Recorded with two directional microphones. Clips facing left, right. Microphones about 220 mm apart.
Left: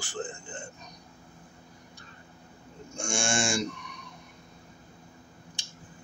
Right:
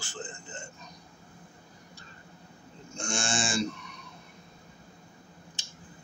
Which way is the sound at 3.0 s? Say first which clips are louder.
Left 2 dB; 10° left (ahead or behind).